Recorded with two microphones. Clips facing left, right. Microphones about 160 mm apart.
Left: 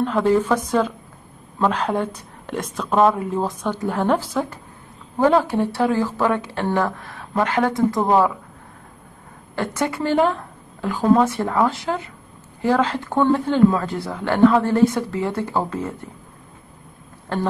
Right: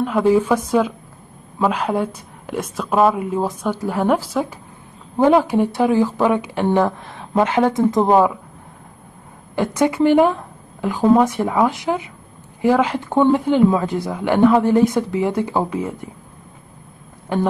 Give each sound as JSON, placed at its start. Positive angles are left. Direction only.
{"t": 0.0, "sound": "speech", "side_deg": -10}
{"t": 9.6, "sound": "speech", "side_deg": -15}
{"t": 17.3, "sound": "speech", "side_deg": -15}